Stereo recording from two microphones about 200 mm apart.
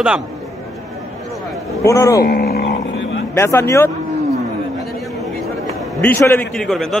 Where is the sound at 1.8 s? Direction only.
15° left (ahead or behind).